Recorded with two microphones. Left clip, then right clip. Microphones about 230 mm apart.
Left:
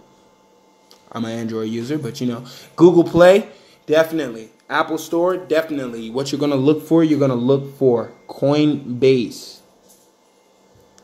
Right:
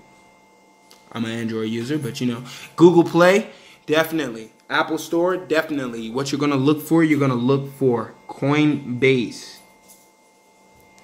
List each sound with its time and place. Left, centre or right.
1.0 s a man's voice: centre
2.3 s speech: centre
2.9 s a man's voice: centre
8.5 s a man's voice: centre